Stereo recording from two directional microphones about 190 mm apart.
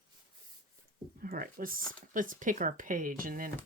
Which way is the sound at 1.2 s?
50° right (ahead or behind).